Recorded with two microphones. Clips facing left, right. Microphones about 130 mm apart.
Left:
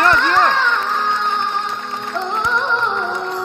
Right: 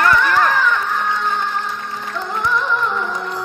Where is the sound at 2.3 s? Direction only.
25° left (ahead or behind).